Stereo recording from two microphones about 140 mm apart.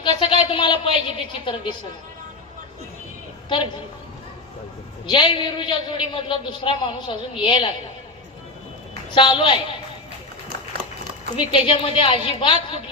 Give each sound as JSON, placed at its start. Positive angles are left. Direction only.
{"t": 0.0, "sound": "a sound", "side_deg": 35}
{"t": 5.0, "sound": "a man's voice", "side_deg": 35}
{"t": 9.1, "sound": "a man's voice", "side_deg": 35}
{"t": 11.3, "sound": "a man's voice", "side_deg": 40}